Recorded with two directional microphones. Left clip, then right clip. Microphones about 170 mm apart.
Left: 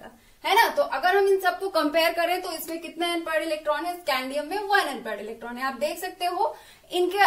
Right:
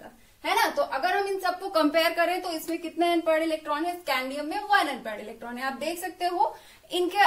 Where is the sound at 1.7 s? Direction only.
30° right (ahead or behind).